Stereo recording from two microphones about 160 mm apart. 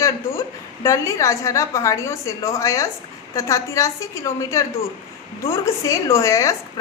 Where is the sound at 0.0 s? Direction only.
20° left (ahead or behind).